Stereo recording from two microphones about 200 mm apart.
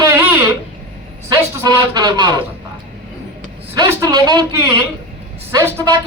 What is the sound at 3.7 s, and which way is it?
Speech, 20° right (ahead or behind).